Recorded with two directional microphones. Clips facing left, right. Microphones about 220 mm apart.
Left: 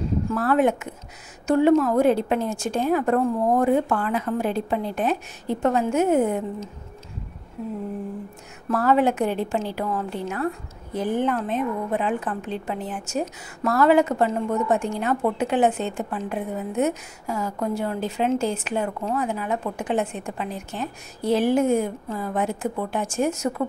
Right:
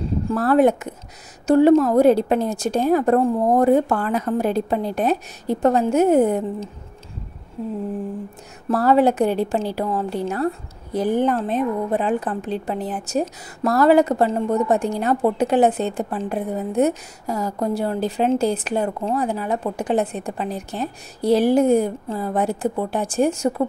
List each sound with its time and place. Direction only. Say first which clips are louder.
0.3 s a woman's voice: right 5 dB; 35° right (ahead or behind)
8.6 s a woman's voice: right 4 dB; 35° right (ahead or behind)